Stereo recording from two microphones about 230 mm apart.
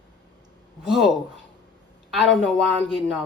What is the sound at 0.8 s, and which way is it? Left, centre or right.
Speech, centre.